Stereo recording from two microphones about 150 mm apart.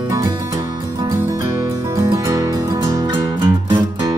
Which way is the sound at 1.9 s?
20° right (ahead or behind).